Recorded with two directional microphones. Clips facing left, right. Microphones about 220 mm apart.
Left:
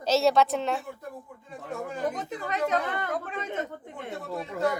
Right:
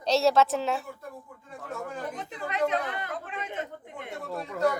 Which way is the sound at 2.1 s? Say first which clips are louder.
Left 1 dB; 45° left (ahead or behind).